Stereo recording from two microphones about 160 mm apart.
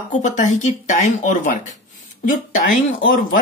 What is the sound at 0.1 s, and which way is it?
Speech, 50° left (ahead or behind).